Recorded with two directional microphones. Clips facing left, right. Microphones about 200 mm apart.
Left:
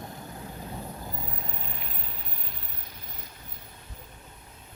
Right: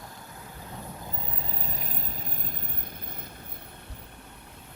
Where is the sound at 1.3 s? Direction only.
30° right (ahead or behind); by 3.3 s 55° right (ahead or behind).